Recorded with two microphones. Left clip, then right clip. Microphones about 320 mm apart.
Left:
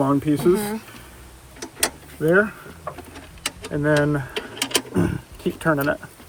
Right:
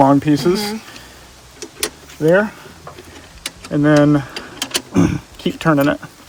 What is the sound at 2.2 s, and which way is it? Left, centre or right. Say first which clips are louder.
Speech: right 4 dB; right.